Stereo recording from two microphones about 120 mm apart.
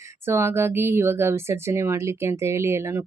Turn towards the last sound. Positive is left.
turn(degrees=-20)  # may be behind; listen again after turning